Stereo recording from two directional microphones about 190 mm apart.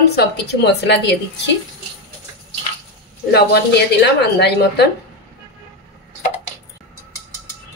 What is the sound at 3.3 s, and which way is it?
A woman's voice, 60° left (ahead or behind).